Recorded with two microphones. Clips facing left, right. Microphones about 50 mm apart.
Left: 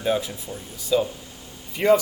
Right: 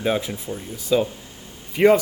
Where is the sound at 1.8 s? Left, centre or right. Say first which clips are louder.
Right 4 dB; right.